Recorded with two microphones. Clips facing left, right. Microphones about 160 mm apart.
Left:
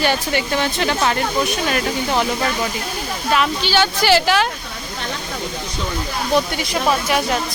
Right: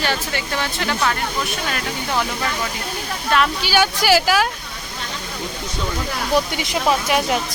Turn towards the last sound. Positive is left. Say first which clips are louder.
# even
turn(degrees=-15)  # may be behind; listen again after turning